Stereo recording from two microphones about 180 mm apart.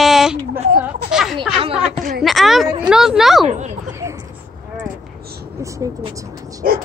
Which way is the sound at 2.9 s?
5° right (ahead or behind).